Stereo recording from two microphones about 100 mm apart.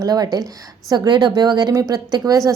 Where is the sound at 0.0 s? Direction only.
40° right (ahead or behind).